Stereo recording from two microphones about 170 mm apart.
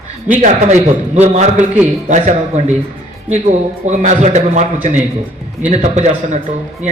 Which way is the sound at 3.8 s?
45° right (ahead or behind).